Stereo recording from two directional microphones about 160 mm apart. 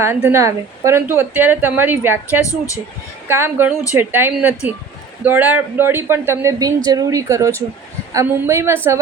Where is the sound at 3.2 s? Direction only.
15° right (ahead or behind).